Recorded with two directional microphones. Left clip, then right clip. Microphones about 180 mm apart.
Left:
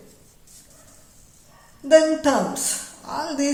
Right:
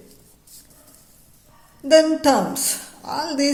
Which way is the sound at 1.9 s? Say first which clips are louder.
Right 1 dB; 35° right (ahead or behind).